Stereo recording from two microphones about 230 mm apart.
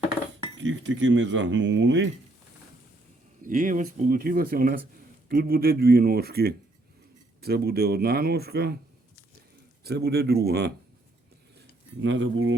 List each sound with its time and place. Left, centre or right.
0.6 s speech: right
3.4 s speech: right
9.8 s speech: right
11.5 s cutlery: right